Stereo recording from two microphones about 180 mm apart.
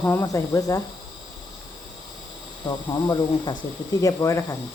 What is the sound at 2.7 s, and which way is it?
Speech, 25° left (ahead or behind).